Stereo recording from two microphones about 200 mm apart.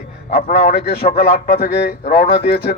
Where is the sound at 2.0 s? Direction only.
50° left (ahead or behind).